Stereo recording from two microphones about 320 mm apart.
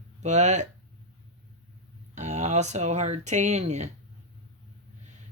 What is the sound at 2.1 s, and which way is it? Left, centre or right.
Speech, right.